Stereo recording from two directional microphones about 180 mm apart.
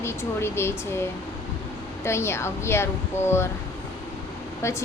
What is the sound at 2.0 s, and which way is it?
A woman's voice, 15° left (ahead or behind).